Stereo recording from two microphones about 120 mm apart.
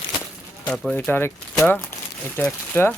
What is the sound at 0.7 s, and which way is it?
Speech, 5° left (ahead or behind).